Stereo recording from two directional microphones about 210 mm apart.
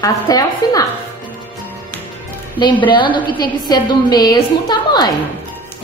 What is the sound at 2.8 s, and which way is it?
A woman's voice, 20° left (ahead or behind).